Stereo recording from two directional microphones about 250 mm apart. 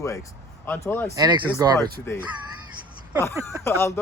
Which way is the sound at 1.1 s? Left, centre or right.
Centre.